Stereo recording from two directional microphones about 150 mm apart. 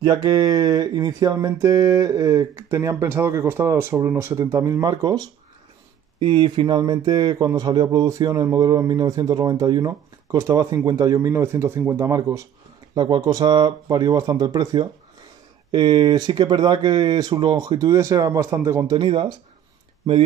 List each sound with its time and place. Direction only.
0.0 s speech: 25° right (ahead or behind)
18.9 s speech: 30° right (ahead or behind)